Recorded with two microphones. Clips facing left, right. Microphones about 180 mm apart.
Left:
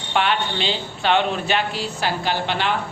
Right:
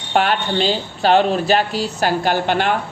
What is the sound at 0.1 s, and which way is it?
A man's voice, 45° right (ahead or behind).